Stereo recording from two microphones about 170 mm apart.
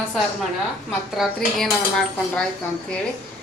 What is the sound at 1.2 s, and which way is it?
Speech, centre (ahead or behind).